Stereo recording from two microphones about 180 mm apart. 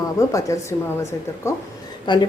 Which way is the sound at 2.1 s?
25° left (ahead or behind).